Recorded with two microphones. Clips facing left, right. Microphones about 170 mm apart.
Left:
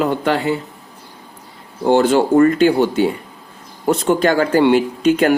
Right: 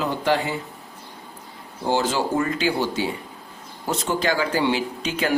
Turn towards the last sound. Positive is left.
turn(degrees=55)  # may be behind; listen again after turning